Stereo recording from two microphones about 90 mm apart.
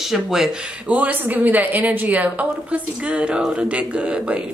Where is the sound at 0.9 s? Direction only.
15° right (ahead or behind).